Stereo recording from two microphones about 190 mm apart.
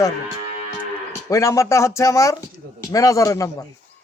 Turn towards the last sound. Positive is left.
turn(degrees=15)  # may be behind; listen again after turning